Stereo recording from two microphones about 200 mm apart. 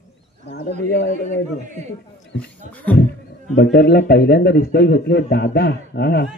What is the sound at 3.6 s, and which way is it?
Speech, 55° left (ahead or behind).